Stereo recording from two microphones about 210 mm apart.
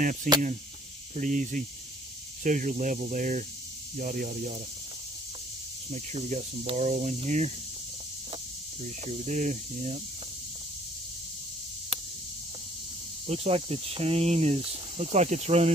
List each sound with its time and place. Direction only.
0.0 s speech: 40° right (ahead or behind)
5.9 s speech: 30° right (ahead or behind)
8.8 s speech: 35° right (ahead or behind)
13.3 s speech: 30° right (ahead or behind)